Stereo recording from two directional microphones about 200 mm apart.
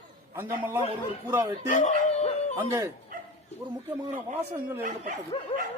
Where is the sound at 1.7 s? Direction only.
35° left (ahead or behind).